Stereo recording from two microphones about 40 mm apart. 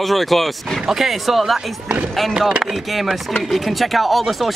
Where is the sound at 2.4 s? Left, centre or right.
Right.